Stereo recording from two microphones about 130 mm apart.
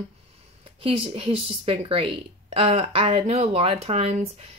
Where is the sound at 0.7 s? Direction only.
45° right (ahead or behind).